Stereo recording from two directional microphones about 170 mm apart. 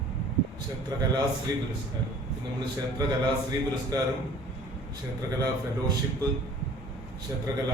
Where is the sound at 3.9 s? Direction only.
20° right (ahead or behind).